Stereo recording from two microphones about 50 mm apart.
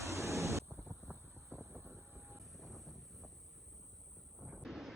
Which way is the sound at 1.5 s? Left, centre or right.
Centre.